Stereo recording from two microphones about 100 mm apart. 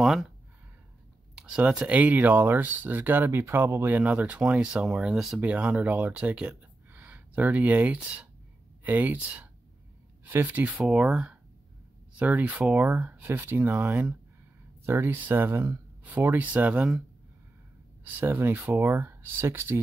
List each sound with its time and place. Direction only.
0.0 s a sound: centre (ahead or behind)
1.3 s clicking: 5° right (ahead or behind)
1.6 s speech: 10° right (ahead or behind)
5.4 s speech: 15° right (ahead or behind)
10.2 s speech: 20° right (ahead or behind)
18.2 s speech: 20° right (ahead or behind)